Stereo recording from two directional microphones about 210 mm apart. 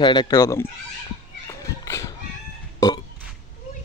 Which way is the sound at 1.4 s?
15° left (ahead or behind).